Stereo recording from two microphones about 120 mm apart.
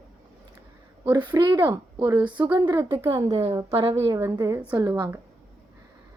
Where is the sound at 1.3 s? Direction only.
35° right (ahead or behind).